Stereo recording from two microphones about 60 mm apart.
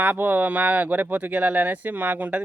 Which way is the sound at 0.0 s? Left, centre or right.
Right.